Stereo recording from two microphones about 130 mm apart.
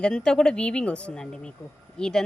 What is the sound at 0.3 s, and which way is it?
A woman's voice, 5° left (ahead or behind).